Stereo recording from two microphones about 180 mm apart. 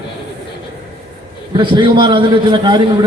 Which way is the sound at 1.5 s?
25° right (ahead or behind).